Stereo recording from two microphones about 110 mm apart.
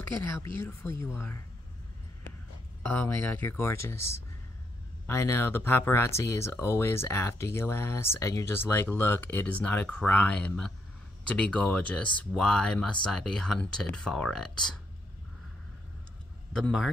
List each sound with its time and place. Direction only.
0.6 s speech: 20° left (ahead or behind)
2.8 s speech: 15° left (ahead or behind)
16.5 s a man's voice: centre (ahead or behind)